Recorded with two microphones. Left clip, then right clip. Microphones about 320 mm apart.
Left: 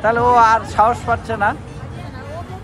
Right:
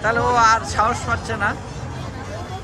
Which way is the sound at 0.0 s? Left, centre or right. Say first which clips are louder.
Left 4 dB; centre.